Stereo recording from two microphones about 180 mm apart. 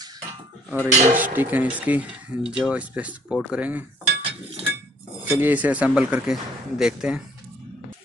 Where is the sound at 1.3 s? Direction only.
10° right (ahead or behind).